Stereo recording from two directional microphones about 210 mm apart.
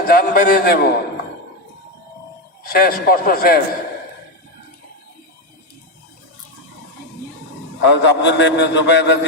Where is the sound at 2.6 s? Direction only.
45° left (ahead or behind).